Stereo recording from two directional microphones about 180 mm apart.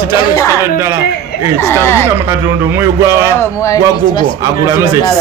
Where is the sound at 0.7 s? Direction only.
15° right (ahead or behind).